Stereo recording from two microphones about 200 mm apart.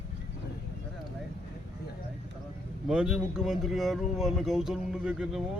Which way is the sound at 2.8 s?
5° right (ahead or behind).